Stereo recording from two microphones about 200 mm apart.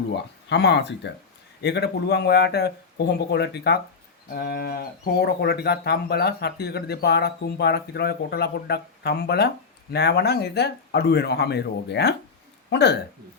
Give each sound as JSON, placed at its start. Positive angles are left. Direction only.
{"t": 0.4, "sound": "speech", "side_deg": 60}